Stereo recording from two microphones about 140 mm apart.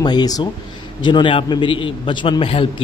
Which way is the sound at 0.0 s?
30° left (ahead or behind).